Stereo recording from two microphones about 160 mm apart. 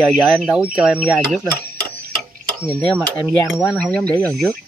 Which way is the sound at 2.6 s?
5° left (ahead or behind).